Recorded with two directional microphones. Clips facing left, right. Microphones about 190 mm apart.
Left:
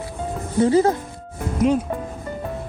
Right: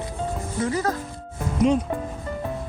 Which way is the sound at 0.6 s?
25° left (ahead or behind).